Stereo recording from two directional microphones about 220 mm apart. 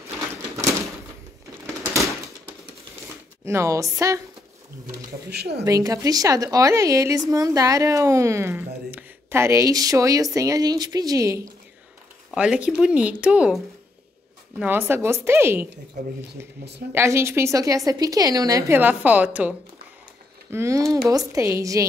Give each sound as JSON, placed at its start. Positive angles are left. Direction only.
{"t": 3.4, "sound": "a woman's voice", "side_deg": -15}
{"t": 5.3, "sound": "speech", "side_deg": -50}
{"t": 5.7, "sound": "a woman's voice", "side_deg": -15}
{"t": 14.6, "sound": "a woman's voice", "side_deg": -10}
{"t": 16.9, "sound": "a woman's voice", "side_deg": -10}
{"t": 20.5, "sound": "a woman's voice", "side_deg": -15}